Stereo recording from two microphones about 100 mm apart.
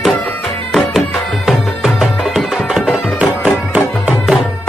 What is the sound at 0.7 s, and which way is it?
Music, centre (ahead or behind).